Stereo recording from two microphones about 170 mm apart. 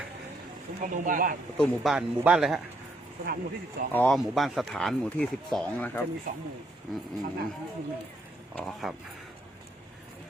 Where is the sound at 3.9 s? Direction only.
10° left (ahead or behind).